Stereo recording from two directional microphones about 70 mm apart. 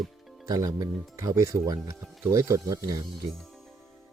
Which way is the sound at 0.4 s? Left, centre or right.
Right.